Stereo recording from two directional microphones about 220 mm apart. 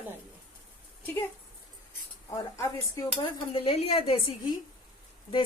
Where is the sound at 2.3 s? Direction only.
15° left (ahead or behind).